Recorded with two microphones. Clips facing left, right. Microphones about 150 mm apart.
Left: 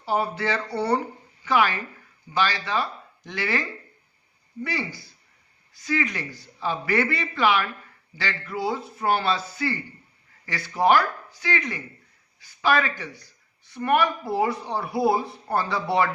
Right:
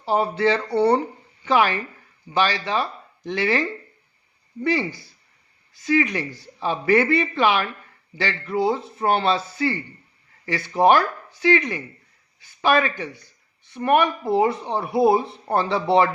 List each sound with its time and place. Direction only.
0.0 s speech: 25° right (ahead or behind)
2.3 s speech: 20° right (ahead or behind)
4.6 s speech: 25° right (ahead or behind)